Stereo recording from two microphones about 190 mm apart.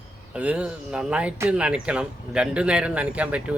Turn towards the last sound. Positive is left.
turn(degrees=-5)  # may be behind; listen again after turning